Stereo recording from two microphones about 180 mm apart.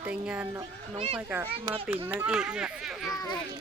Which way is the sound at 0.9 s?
35° right (ahead or behind).